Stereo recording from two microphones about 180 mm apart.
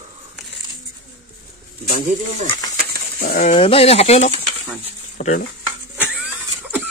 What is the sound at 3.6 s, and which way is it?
Speech, 30° left (ahead or behind).